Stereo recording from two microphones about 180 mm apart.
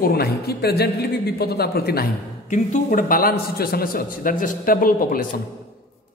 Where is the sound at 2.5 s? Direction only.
40° left (ahead or behind).